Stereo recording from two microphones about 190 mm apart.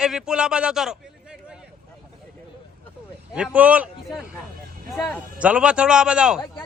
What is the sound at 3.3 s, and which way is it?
A man's voice, 5° right (ahead or behind).